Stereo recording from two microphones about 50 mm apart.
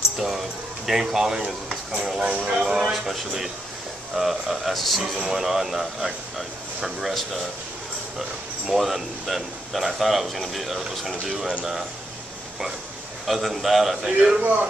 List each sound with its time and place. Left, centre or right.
0.8 s speech: centre
8.6 s speech: centre
13.3 s speech: centre
14.4 s a man's voice: right